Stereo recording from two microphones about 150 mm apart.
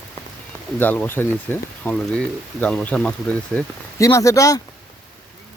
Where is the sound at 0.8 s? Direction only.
10° left (ahead or behind).